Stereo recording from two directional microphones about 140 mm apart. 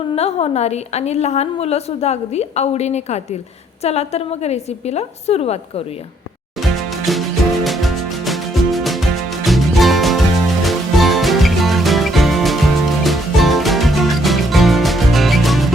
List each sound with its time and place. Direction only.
0.2 s a woman's voice: 45° left (ahead or behind)
7.1 s music: centre (ahead or behind)